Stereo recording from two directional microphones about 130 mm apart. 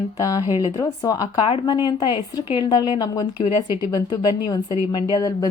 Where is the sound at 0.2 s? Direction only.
30° left (ahead or behind).